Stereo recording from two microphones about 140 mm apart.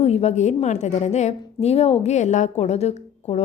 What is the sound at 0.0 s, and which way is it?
A woman's voice, 50° left (ahead or behind).